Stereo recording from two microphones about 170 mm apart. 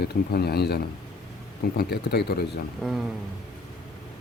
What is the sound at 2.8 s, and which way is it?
Speech, centre (ahead or behind).